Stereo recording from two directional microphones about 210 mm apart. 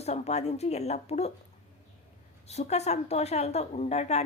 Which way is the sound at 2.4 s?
30° left (ahead or behind).